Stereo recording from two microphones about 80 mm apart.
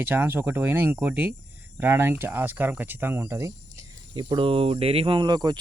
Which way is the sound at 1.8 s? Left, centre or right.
Right.